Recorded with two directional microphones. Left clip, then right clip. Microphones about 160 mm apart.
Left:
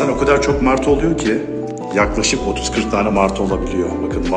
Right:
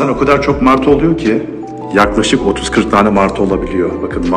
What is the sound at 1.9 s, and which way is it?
Speech, 15° right (ahead or behind).